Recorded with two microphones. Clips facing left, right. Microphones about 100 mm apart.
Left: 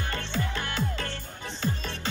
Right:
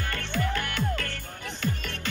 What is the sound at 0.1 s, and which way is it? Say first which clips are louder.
Music: right 4 dB; 25° left (ahead or behind).